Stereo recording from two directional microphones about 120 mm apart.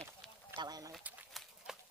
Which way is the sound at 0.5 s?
35° right (ahead or behind).